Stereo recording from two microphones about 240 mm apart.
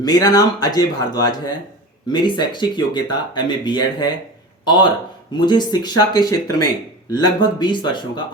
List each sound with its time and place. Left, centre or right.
0.0 s speech: centre